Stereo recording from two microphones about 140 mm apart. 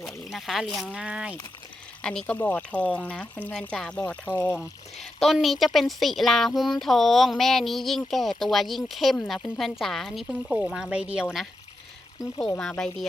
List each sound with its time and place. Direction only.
0.0 s a woman's voice: centre (ahead or behind)
2.0 s speech: 5° left (ahead or behind)
4.0 s speech: 15° left (ahead or behind)
5.2 s a woman's voice: centre (ahead or behind)
12.5 s a woman's voice: 5° left (ahead or behind)